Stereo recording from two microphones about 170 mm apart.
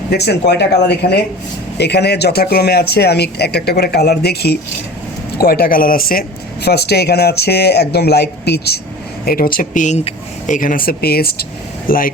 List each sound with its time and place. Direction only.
0.1 s speech: 75° left (ahead or behind)
9.2 s speech: 60° left (ahead or behind)